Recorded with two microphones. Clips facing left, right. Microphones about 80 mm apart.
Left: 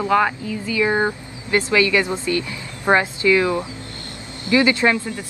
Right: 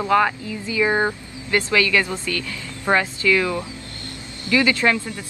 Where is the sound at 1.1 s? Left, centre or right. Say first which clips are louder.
Left 1 dB; centre.